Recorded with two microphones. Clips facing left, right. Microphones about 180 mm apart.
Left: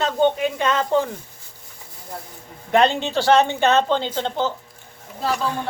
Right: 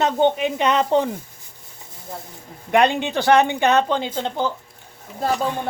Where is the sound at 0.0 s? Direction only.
20° right (ahead or behind).